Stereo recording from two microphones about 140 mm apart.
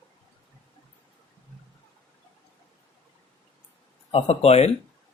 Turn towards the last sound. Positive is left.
turn(degrees=45)  # may be behind; listen again after turning